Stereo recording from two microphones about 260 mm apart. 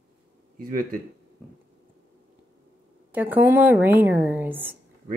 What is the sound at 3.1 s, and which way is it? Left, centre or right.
A woman's voice, centre.